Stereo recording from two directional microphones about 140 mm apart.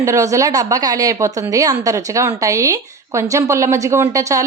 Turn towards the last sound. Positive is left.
turn(degrees=-20)  # may be behind; listen again after turning